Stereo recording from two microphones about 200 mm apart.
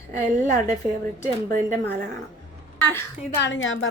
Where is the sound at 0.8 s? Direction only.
10° right (ahead or behind).